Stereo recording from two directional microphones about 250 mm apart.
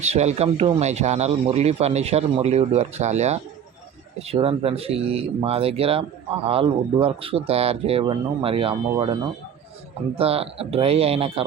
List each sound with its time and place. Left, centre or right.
0.0 s speech: right
10.2 s speech: right